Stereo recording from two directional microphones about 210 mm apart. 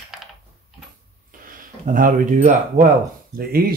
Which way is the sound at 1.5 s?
40° right (ahead or behind).